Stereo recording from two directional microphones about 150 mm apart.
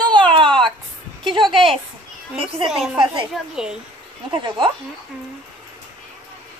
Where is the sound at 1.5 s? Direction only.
Centre (ahead or behind).